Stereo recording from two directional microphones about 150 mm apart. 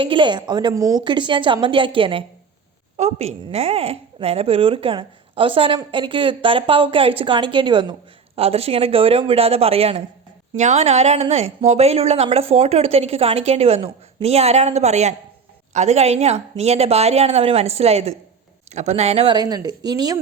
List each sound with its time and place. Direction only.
0.0 s a woman's voice: 35° right (ahead or behind)
3.0 s a woman's voice: 45° right (ahead or behind)
19.4 s a woman's voice: 25° right (ahead or behind)